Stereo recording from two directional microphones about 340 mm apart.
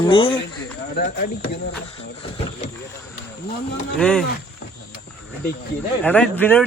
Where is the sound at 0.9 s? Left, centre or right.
Left.